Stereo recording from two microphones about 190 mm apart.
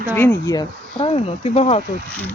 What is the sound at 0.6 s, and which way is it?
Speech, 30° left (ahead or behind).